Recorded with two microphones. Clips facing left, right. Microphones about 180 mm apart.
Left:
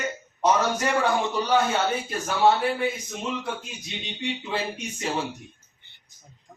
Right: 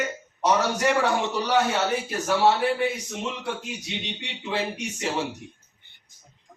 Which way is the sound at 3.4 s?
75° right (ahead or behind).